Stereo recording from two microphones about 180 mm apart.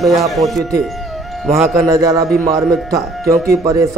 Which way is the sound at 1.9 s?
20° right (ahead or behind).